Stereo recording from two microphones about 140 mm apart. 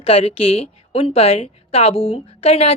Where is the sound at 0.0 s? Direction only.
45° left (ahead or behind).